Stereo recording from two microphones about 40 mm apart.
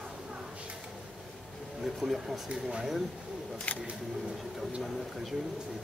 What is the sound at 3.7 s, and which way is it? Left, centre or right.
Speech, left.